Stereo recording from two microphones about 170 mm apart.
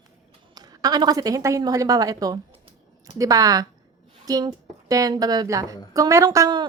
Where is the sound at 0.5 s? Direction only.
20° right (ahead or behind).